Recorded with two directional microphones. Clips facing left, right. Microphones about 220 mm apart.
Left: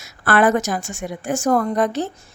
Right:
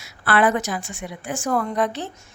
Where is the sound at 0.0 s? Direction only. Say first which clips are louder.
Left 3 dB; 45° left (ahead or behind).